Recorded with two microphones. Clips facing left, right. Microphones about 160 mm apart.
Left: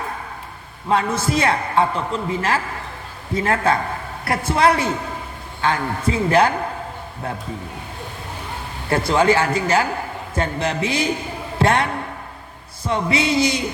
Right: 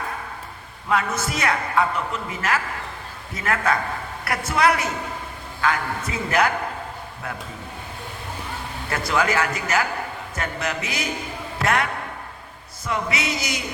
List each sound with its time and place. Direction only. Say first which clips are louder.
0.9 s a man's voice: left 4 dB; 30° left (ahead or behind)
8.9 s a man's voice: left 6 dB; 30° left (ahead or behind)